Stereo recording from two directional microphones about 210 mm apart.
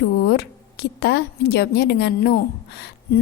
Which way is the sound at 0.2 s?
50° left (ahead or behind).